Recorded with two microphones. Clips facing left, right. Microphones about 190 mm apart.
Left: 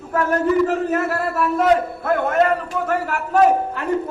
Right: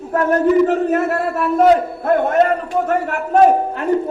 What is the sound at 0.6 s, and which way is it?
Speech, 35° right (ahead or behind).